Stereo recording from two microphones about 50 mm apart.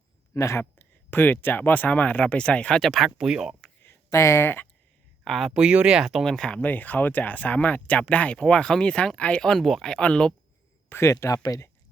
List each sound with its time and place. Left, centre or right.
0.3 s speech: left
0.6 s speech: left
2.8 s speech: centre
3.2 s speech: centre
4.1 s speech: left
5.2 s speech: centre
5.5 s speech: centre
6.0 s speech: centre
6.2 s speech: centre
6.6 s speech: left
9.4 s speech: centre
11.0 s speech: left